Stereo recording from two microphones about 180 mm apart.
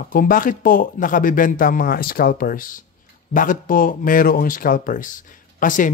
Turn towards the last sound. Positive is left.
turn(degrees=45)  # may be behind; listen again after turning